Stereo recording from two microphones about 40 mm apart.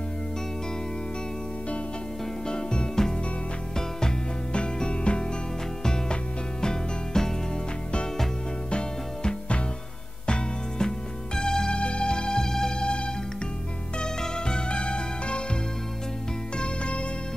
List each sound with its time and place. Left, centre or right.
2.4 s music: left
6.6 s music: centre
8.6 s music: left
16.5 s music: left